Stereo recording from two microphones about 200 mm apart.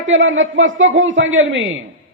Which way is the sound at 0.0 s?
75° right (ahead or behind).